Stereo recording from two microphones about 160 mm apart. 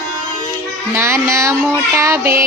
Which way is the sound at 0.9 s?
15° right (ahead or behind).